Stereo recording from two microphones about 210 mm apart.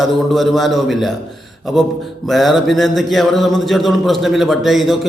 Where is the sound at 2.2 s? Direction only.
Centre (ahead or behind).